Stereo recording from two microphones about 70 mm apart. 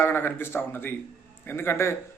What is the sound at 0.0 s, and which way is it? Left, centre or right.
Speech, left.